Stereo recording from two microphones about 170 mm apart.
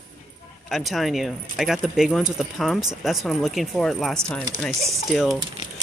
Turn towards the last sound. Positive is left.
turn(degrees=0)  # may be behind; listen again after turning